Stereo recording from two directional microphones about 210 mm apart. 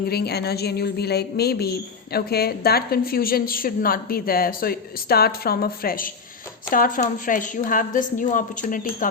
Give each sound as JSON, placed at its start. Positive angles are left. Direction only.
{"t": 0.1, "sound": "a woman's voice", "side_deg": 50}